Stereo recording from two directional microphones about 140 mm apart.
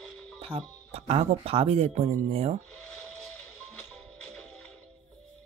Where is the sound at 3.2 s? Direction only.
10° left (ahead or behind).